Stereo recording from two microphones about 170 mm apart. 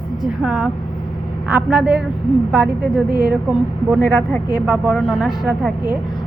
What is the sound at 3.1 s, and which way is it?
Speech, 70° right (ahead or behind).